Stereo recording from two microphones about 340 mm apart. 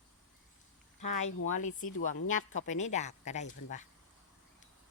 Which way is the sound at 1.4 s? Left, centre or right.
Left.